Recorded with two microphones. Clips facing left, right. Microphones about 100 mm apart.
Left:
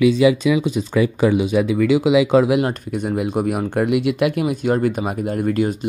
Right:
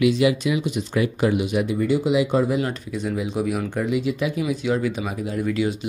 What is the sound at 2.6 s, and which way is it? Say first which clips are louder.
Speech: left 4 dB; 55° left (ahead or behind).